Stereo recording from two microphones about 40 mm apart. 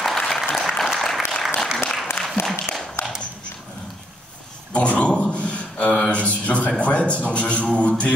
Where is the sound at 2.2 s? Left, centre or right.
Centre.